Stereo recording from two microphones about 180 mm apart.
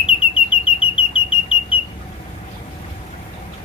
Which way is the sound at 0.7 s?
30° left (ahead or behind).